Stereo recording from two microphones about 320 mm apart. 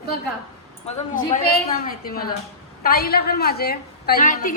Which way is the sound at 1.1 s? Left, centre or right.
Left.